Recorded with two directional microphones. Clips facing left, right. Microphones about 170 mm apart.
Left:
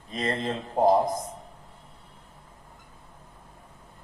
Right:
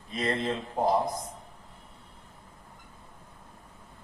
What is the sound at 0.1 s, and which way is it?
Speech, 35° left (ahead or behind).